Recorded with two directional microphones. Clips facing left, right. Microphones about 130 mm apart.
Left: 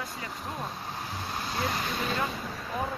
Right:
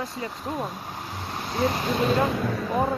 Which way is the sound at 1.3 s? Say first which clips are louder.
Right 7 dB; 20° right (ahead or behind).